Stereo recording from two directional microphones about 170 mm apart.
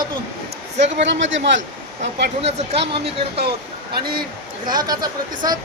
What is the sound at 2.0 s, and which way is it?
Speech, 40° right (ahead or behind).